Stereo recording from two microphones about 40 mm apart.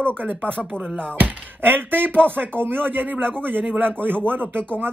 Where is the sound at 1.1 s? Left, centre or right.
Right.